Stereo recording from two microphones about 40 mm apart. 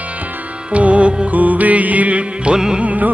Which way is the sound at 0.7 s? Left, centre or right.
Right.